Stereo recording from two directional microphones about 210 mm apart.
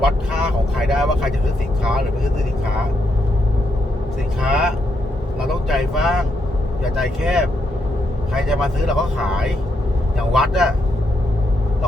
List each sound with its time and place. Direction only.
0.8 s speech: centre (ahead or behind)
4.4 s speech: centre (ahead or behind)